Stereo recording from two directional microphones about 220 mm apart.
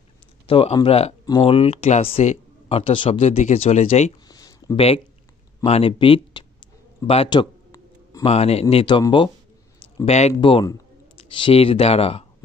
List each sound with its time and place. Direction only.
0.5 s speech: 25° left (ahead or behind)
4.3 s a sound: 15° left (ahead or behind)
8.3 s speech: 30° left (ahead or behind)